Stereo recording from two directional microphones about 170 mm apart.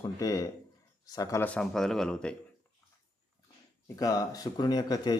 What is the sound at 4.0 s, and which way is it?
Speech, 20° left (ahead or behind).